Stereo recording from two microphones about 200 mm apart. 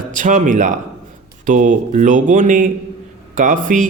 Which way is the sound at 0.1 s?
40° right (ahead or behind).